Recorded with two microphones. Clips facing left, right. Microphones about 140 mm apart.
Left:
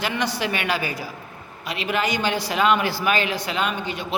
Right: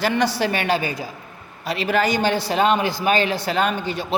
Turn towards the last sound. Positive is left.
turn(degrees=-35)  # may be behind; listen again after turning